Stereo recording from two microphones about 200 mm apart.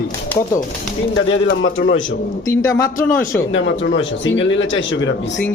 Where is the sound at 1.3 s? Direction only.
75° left (ahead or behind).